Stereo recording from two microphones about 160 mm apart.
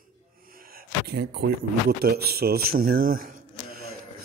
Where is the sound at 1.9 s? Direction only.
80° right; by 3.3 s 60° right (ahead or behind).